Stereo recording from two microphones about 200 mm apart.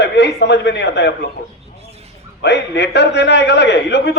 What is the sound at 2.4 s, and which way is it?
A man's voice, 55° left (ahead or behind).